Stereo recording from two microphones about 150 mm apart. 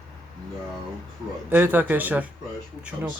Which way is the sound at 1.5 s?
15° right (ahead or behind).